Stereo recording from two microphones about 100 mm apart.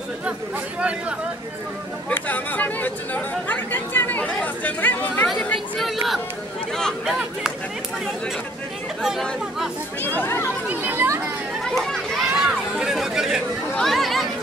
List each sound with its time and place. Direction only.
0.7 s speech: 10° right (ahead or behind)
2.0 s speech: 15° left (ahead or behind)
5.8 s speech: centre (ahead or behind)
9.0 s speech: 5° right (ahead or behind)
10.0 s speech: 20° left (ahead or behind)
10.7 s speech: 20° right (ahead or behind)
11.7 s speech: centre (ahead or behind)